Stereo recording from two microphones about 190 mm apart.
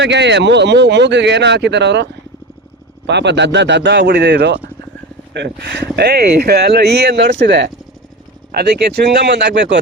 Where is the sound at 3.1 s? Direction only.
65° right (ahead or behind).